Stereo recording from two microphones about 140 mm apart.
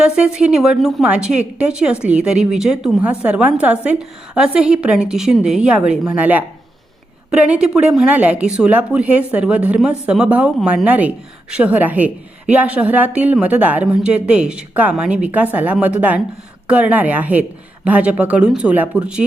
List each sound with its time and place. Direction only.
0.0 s a woman's voice: 5° right (ahead or behind)